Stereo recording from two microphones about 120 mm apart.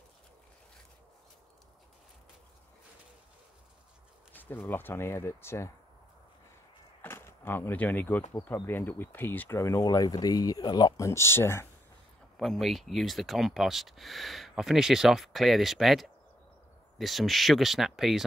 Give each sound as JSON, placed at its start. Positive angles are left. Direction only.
{"t": 4.3, "sound": "speech", "side_deg": 15}
{"t": 7.0, "sound": "a sound", "side_deg": 20}
{"t": 8.6, "sound": "speech", "side_deg": 15}
{"t": 9.6, "sound": "speech", "side_deg": 25}
{"t": 12.4, "sound": "speech", "side_deg": 0}